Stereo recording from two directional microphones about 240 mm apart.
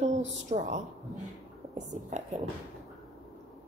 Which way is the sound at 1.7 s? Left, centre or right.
Right.